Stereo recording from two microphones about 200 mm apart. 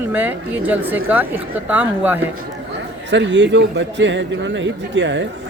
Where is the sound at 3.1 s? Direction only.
65° right (ahead or behind).